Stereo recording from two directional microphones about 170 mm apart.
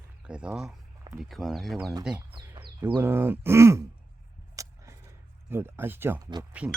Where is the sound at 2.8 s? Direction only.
15° right (ahead or behind).